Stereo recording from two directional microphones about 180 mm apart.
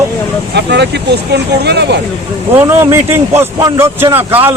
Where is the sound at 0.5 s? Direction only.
70° right (ahead or behind).